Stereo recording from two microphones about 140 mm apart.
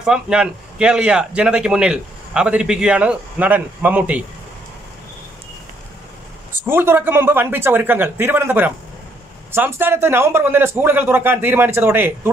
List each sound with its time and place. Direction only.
0.0 s a man's voice: 5° right (ahead or behind)
6.6 s a man's voice: 15° right (ahead or behind)